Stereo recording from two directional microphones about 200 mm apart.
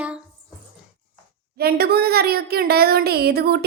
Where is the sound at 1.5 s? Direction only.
50° right (ahead or behind).